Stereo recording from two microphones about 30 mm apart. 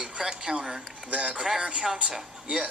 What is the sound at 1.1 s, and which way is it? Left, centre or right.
Speech, right.